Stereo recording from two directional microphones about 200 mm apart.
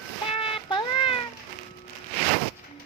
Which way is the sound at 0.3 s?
25° left (ahead or behind).